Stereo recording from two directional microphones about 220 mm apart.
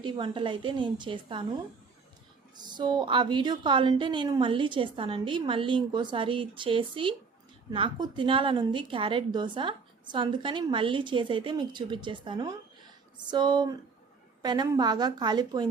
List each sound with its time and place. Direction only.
0.0 s a woman's voice: 20° right (ahead or behind)
2.6 s a woman's voice: 20° right (ahead or behind)